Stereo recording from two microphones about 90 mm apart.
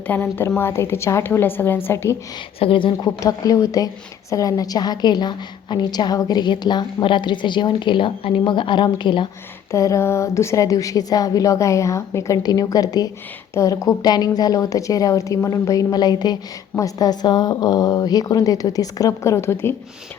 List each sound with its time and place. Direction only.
0.1 s a woman's voice: 25° left (ahead or behind)
2.6 s speech: 75° left (ahead or behind)
3.2 s a woman's voice: 40° left (ahead or behind); by 9.3 s 60° left (ahead or behind)
9.7 s a woman's voice: 35° left (ahead or behind)
12.4 s a woman's voice: 45° left (ahead or behind); by 19.7 s 30° left (ahead or behind)